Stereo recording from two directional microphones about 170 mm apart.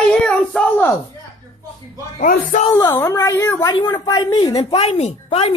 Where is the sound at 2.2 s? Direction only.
50° left (ahead or behind).